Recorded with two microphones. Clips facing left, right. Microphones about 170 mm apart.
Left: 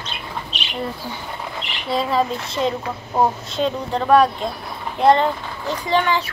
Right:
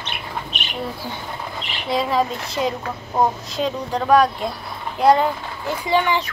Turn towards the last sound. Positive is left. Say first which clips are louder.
# even
turn(degrees=-15)  # may be behind; listen again after turning